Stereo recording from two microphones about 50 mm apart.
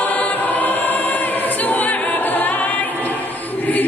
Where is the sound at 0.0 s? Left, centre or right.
Left.